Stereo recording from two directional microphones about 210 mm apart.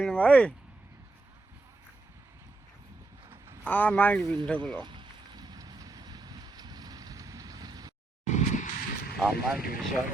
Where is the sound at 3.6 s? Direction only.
5° left (ahead or behind).